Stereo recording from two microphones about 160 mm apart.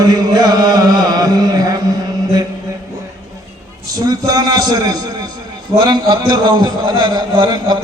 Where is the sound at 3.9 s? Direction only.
25° right (ahead or behind).